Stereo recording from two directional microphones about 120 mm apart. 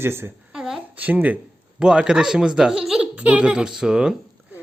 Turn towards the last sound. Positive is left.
turn(degrees=-5)  # may be behind; listen again after turning